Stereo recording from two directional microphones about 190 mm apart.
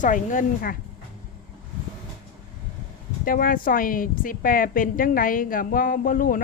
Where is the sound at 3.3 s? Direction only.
45° left (ahead or behind).